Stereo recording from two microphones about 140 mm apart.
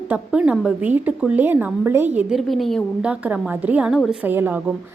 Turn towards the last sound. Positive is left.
turn(degrees=-15)  # may be behind; listen again after turning